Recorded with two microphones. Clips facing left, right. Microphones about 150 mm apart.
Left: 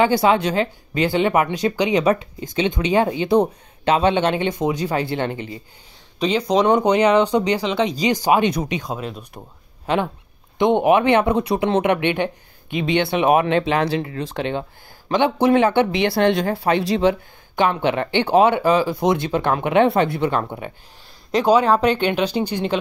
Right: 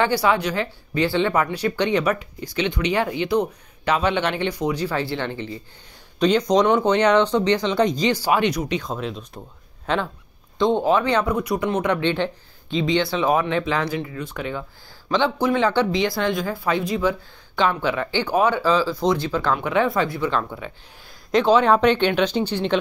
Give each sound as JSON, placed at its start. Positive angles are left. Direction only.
{"t": 0.0, "sound": "speech", "side_deg": 20}
{"t": 6.1, "sound": "speech", "side_deg": 5}
{"t": 6.7, "sound": "speech", "side_deg": 15}
{"t": 10.6, "sound": "speech", "side_deg": 20}
{"t": 12.7, "sound": "speech", "side_deg": 60}
{"t": 15.6, "sound": "speech", "side_deg": 20}
{"t": 15.9, "sound": "speech", "side_deg": 65}
{"t": 17.6, "sound": "speech", "side_deg": 20}
{"t": 19.6, "sound": "speech", "side_deg": 65}
{"t": 21.5, "sound": "speech", "side_deg": 10}